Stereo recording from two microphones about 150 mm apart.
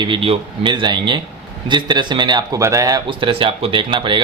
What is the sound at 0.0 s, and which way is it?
A man's voice, 35° right (ahead or behind).